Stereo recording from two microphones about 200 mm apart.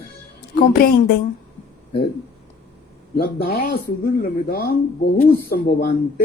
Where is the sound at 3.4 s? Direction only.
50° left (ahead or behind).